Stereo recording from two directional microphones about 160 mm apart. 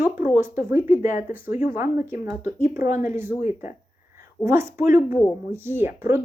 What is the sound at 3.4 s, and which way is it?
Speech, 50° left (ahead or behind).